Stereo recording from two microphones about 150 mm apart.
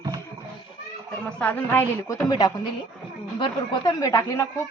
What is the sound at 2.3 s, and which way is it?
A woman's voice, 30° left (ahead or behind).